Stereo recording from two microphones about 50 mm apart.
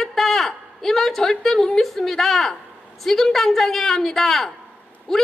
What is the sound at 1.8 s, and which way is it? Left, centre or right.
A woman's voice, centre.